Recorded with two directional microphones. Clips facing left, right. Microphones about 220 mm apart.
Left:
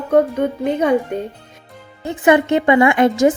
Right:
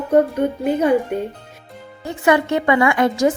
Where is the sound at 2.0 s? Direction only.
20° left (ahead or behind).